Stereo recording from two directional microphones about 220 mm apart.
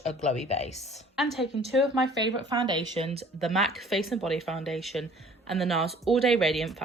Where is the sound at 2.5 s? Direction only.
20° right (ahead or behind).